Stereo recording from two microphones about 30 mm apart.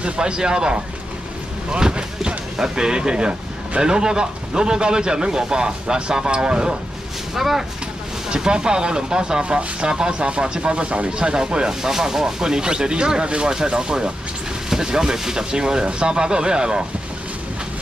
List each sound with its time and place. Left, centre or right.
0.0 s a man's voice: right
1.7 s a sound: right
2.5 s a man's voice: right
7.3 s speech: centre
8.3 s a man's voice: right
11.9 s a man's voice: centre